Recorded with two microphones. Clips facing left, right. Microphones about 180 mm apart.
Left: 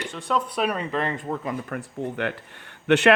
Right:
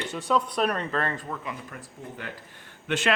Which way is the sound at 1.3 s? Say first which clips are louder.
Left 6 dB; 40° left (ahead or behind).